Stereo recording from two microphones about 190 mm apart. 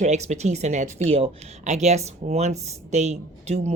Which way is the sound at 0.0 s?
35° right (ahead or behind).